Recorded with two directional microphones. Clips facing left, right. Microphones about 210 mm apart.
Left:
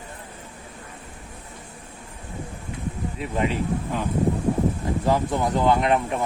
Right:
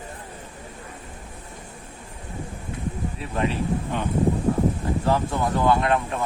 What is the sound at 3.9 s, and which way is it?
Speech, centre (ahead or behind).